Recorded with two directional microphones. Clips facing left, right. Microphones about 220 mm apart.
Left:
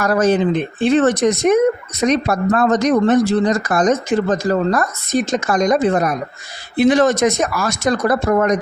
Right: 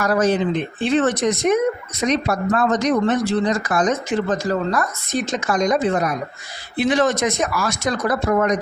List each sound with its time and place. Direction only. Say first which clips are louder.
0.0 s speech: left 3 dB; 50° left (ahead or behind)